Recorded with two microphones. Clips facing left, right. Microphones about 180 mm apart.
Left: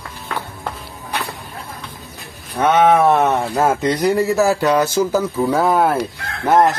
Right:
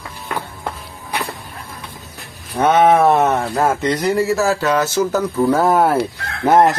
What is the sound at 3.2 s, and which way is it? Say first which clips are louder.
Speech: even; centre (ahead or behind).